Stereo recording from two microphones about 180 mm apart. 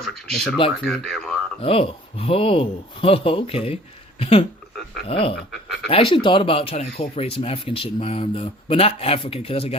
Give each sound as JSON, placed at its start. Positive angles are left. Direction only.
{"t": 0.1, "sound": "speech", "side_deg": 0}
{"t": 1.6, "sound": "speech", "side_deg": 30}
{"t": 5.5, "sound": "speech", "side_deg": 0}
{"t": 5.9, "sound": "speech", "side_deg": 30}